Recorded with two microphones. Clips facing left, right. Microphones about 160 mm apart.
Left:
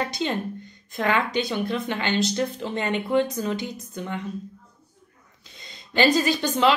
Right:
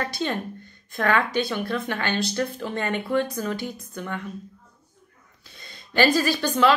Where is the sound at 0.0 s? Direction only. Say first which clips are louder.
Left 1 dB; 20° left (ahead or behind).